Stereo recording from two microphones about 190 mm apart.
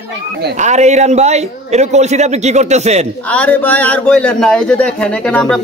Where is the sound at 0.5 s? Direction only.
40° right (ahead or behind).